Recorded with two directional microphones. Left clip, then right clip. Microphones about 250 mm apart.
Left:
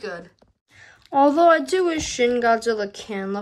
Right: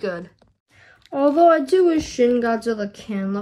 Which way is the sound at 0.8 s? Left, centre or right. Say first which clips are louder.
Left 3 dB; left.